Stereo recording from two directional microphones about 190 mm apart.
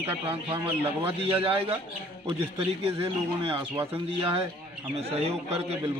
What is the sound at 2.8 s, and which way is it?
A man's voice, 30° right (ahead or behind).